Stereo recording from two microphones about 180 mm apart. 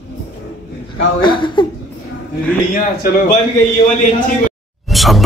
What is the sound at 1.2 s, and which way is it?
Speech, 25° left (ahead or behind).